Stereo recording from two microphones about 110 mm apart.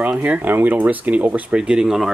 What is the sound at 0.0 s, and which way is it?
Speech, 15° right (ahead or behind).